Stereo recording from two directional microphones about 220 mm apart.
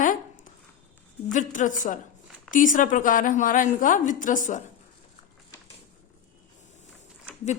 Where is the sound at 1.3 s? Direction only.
35° left (ahead or behind).